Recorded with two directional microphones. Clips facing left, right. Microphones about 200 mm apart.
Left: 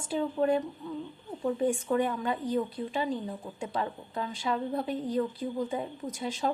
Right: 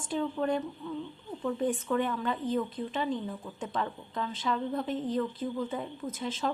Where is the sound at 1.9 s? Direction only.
15° left (ahead or behind).